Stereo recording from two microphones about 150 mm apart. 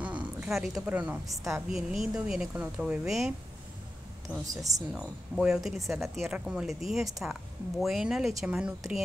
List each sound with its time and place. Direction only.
0.0 s speech: 10° right (ahead or behind)
4.5 s speech: 20° right (ahead or behind)
4.9 s speech: 5° right (ahead or behind)